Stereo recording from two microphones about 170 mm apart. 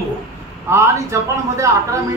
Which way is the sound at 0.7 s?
15° right (ahead or behind).